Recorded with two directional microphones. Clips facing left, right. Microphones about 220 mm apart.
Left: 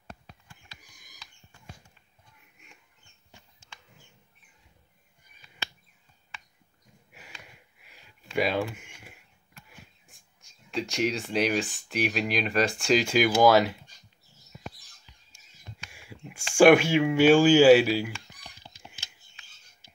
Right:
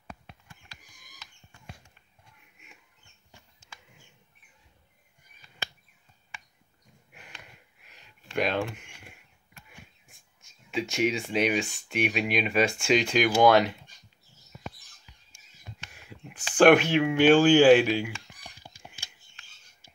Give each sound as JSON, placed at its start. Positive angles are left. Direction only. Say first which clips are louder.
{"t": 7.1, "sound": "sniff", "louder": "even", "side_deg": 5}
{"t": 7.8, "sound": "a sound", "louder": "left 3 dB", "side_deg": 10}
{"t": 9.7, "sound": "speech", "louder": "right 3 dB", "side_deg": 0}
{"t": 15.9, "sound": "speech", "louder": "left 4 dB", "side_deg": 10}